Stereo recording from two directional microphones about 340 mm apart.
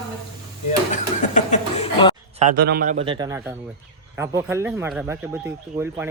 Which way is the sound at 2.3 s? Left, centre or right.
Right.